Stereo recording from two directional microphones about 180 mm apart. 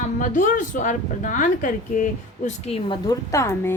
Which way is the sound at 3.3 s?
15° left (ahead or behind).